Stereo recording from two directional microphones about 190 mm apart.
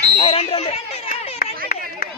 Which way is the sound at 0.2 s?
30° left (ahead or behind).